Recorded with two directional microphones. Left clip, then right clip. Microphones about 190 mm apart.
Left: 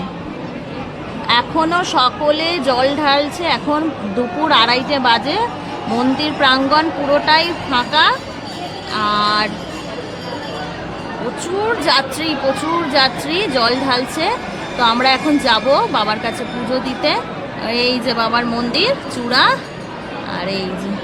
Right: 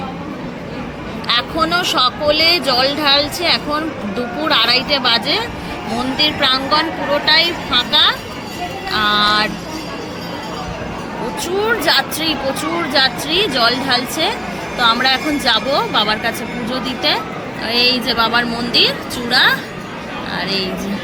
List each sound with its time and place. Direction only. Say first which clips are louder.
1.3 s speech: left 1 dB; 15° left (ahead or behind)
11.9 s a woman's voice: even; 20° left (ahead or behind)